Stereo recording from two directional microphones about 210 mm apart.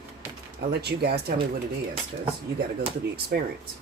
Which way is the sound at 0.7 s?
50° right (ahead or behind).